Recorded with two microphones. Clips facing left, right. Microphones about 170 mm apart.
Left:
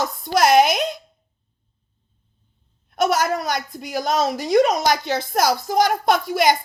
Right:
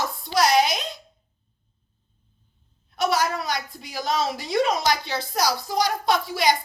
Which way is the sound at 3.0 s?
50° left (ahead or behind).